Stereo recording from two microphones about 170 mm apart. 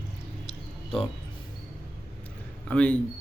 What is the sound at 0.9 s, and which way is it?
Speech, 35° left (ahead or behind).